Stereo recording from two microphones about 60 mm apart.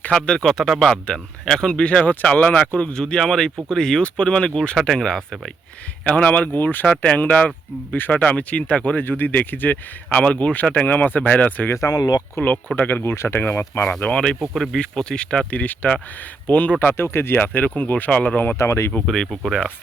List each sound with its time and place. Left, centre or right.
0.1 s speech: centre
0.4 s speech: centre
6.1 s speech: centre
6.8 s speech: centre; by 8.2 s left
8.2 s speech: left
11.7 s speech: left
12.4 s speech: left
14.0 s speech: centre
14.5 s speech: centre
14.8 s speech: centre
17.0 s speech: left; by 18.3 s centre
18.3 s speech: left
18.9 s speech: centre